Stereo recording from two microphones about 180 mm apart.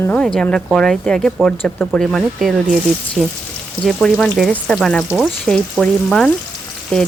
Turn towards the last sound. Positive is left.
turn(degrees=0)  # may be behind; listen again after turning